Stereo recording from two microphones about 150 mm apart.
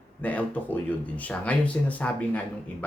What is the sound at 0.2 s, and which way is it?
Speech, 10° left (ahead or behind).